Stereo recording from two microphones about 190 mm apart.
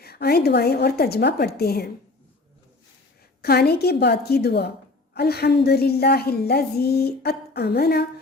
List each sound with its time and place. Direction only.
0.0 s a woman's voice: 55° left (ahead or behind)
3.4 s a woman's voice: 55° left (ahead or behind)